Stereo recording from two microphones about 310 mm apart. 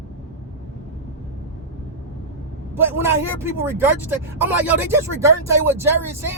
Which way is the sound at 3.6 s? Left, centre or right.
Centre.